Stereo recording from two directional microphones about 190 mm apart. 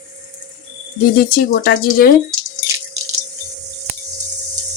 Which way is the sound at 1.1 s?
50° left (ahead or behind).